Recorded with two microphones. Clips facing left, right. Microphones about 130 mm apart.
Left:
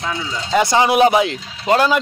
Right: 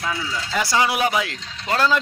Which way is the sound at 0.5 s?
20° left (ahead or behind).